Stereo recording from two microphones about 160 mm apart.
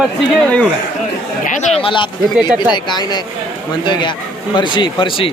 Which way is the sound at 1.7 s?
30° left (ahead or behind).